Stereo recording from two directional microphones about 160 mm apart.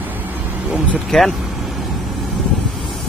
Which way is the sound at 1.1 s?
5° left (ahead or behind).